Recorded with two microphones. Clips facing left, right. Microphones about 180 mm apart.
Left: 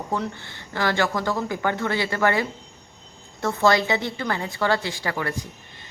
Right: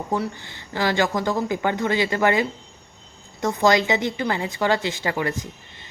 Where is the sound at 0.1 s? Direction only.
15° right (ahead or behind).